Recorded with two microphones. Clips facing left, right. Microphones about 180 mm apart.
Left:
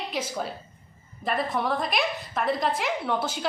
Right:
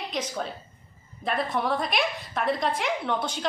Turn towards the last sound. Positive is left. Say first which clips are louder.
# even
turn(degrees=5)  # may be behind; listen again after turning